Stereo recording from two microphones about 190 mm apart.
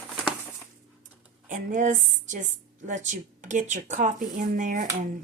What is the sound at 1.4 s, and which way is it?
Speech, 45° right (ahead or behind).